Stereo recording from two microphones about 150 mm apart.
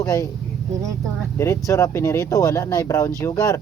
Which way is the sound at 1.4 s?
20° left (ahead or behind).